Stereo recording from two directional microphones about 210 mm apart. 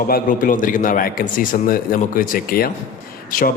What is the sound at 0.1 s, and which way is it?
A man's voice, 40° left (ahead or behind).